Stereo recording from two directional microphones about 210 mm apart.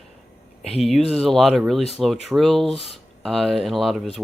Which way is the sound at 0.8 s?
Centre (ahead or behind).